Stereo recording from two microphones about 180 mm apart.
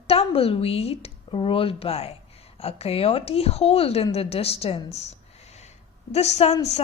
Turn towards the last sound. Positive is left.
turn(degrees=35)  # may be behind; listen again after turning